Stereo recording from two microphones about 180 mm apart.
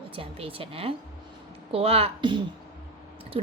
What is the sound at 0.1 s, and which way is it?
Speech, 30° right (ahead or behind).